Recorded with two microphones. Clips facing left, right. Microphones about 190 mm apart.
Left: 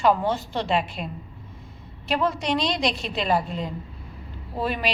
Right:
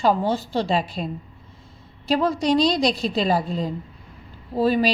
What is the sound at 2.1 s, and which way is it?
A woman's voice, 35° right (ahead or behind).